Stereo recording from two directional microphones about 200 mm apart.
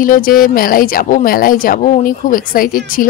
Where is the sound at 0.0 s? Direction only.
45° left (ahead or behind).